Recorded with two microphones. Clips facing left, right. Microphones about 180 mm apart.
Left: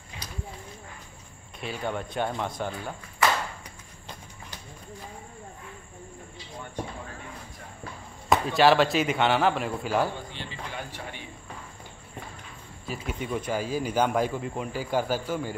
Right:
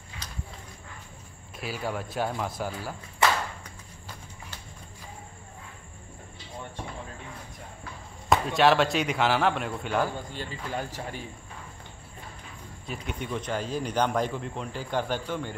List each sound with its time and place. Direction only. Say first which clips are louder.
0.2 s clip-clop: left 3 dB; 10° left (ahead or behind)
1.6 s a man's voice: left 1 dB; 5° right (ahead or behind)
8.3 s a man's voice: left 1 dB; centre (ahead or behind)
10.3 s speech: right 4 dB; 40° right (ahead or behind)
12.8 s speech: left 2 dB; centre (ahead or behind)